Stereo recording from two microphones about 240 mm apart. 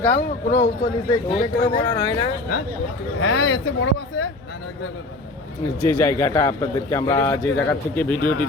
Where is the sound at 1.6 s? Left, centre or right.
Centre.